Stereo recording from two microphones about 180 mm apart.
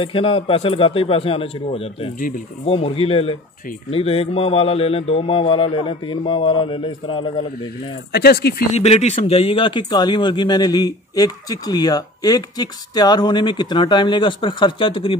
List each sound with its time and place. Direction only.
0.0 s a man's voice: 30° left (ahead or behind)
2.1 s speech: 50° left (ahead or behind)
2.6 s a man's voice: 30° left (ahead or behind)
8.1 s speech: 60° left (ahead or behind)
8.7 s speech: 35° left (ahead or behind)